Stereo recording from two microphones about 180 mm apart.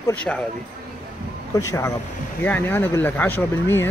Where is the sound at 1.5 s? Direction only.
15° left (ahead or behind).